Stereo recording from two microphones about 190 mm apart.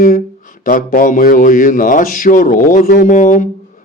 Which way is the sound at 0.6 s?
45° left (ahead or behind).